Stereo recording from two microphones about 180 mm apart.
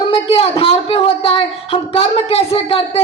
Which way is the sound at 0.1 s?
30° left (ahead or behind).